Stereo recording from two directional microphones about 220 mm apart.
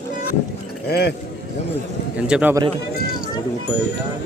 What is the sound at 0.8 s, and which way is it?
Speech, 45° left (ahead or behind).